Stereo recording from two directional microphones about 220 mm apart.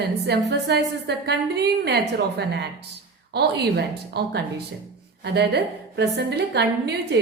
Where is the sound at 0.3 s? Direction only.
50° right (ahead or behind).